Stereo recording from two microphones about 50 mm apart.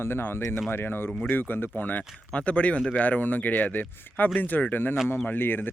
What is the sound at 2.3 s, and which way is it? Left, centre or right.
Speech, left.